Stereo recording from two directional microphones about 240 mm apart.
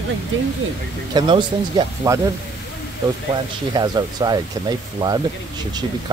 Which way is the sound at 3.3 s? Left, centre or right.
Centre.